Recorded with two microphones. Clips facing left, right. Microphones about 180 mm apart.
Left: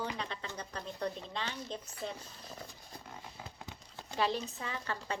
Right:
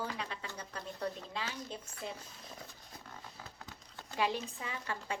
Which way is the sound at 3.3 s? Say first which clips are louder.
Left 3 dB; 20° left (ahead or behind).